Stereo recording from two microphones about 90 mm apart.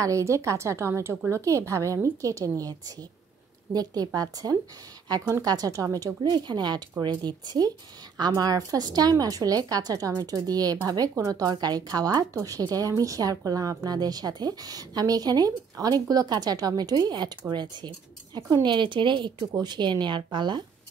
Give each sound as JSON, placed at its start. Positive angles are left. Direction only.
{"t": 0.0, "sound": "a woman's voice", "side_deg": -35}
{"t": 6.2, "sound": "a woman's voice", "side_deg": -55}